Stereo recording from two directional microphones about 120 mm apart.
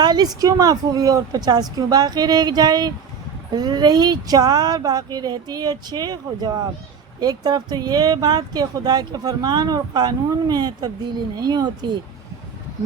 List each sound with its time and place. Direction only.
0.0 s speech: 35° right (ahead or behind)